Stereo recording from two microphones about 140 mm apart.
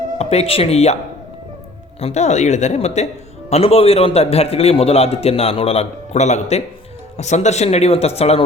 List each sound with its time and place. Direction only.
0.2 s a man's voice: 50° left (ahead or behind)
2.0 s a man's voice: 50° left (ahead or behind)